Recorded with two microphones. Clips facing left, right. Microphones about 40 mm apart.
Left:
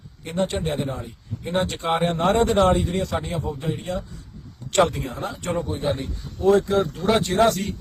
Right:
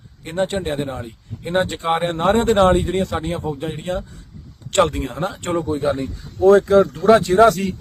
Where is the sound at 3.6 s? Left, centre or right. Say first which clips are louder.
Right 3 dB; right.